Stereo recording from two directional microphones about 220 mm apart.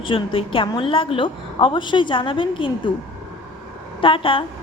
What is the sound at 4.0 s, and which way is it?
Speech, 25° left (ahead or behind).